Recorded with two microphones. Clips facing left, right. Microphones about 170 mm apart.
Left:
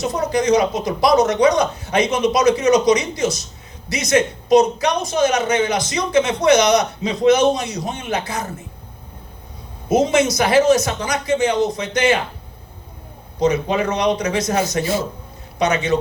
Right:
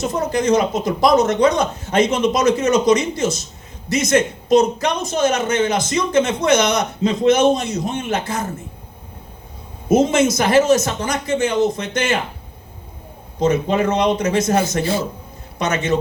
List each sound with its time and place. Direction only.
0.0 s a man's voice: 50° right (ahead or behind)
9.9 s a man's voice: 50° right (ahead or behind)
13.4 s a man's voice: 50° right (ahead or behind)